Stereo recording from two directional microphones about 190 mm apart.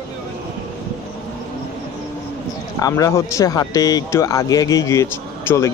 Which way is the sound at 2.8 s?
15° left (ahead or behind).